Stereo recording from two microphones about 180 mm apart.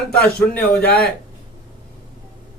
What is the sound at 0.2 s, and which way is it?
Speech, 5° left (ahead or behind).